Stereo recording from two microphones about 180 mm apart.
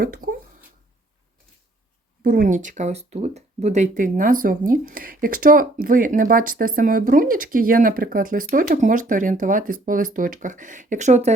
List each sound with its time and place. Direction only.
0.0 s speech: 50° right (ahead or behind)
2.2 s speech: 50° right (ahead or behind)